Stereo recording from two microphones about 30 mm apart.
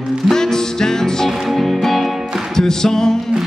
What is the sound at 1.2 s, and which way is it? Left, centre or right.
Music, centre.